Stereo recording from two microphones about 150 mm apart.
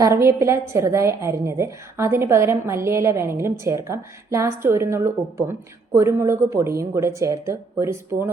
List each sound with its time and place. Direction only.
0.0 s a woman's voice: 20° right (ahead or behind)